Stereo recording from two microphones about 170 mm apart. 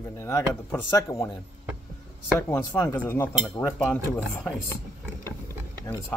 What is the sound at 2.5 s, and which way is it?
Speech, 10° left (ahead or behind).